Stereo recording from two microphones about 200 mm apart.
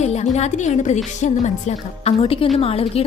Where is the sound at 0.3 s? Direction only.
35° left (ahead or behind).